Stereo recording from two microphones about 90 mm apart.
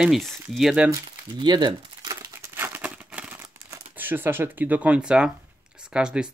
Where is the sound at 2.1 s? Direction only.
35° right (ahead or behind).